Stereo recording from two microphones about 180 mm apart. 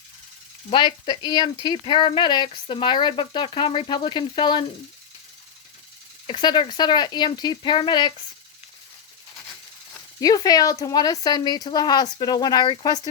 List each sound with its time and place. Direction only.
0.7 s speech: 25° left (ahead or behind)
6.2 s speech: 25° left (ahead or behind)
10.2 s speech: 20° left (ahead or behind)